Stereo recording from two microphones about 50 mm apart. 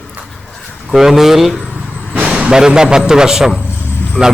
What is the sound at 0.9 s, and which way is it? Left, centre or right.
Speech, centre.